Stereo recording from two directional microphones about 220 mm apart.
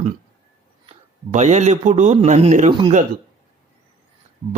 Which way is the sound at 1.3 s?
30° right (ahead or behind).